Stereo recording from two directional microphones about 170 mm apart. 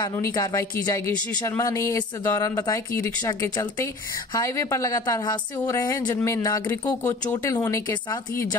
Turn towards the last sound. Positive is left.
turn(degrees=15)  # may be behind; listen again after turning